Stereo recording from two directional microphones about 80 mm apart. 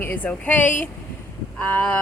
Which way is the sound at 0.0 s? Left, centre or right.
Left.